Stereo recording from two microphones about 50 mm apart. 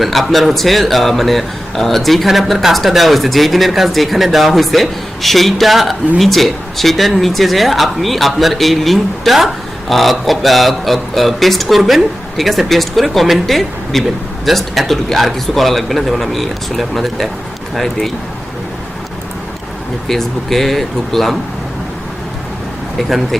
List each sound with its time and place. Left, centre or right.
0.0 s a man's voice: centre
20.1 s a man's voice: centre
23.0 s a man's voice: centre